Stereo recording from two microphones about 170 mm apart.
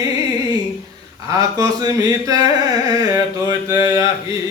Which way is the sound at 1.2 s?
20° right (ahead or behind).